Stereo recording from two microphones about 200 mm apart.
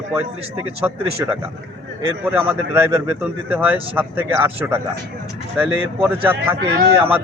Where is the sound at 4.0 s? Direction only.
10° right (ahead or behind).